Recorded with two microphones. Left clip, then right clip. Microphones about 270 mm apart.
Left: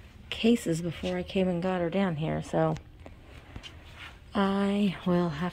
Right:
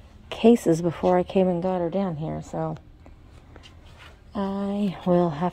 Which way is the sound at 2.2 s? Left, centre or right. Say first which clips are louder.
Left 2 dB; centre.